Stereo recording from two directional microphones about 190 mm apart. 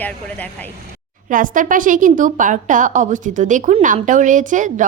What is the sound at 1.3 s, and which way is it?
A woman's voice, 45° right (ahead or behind).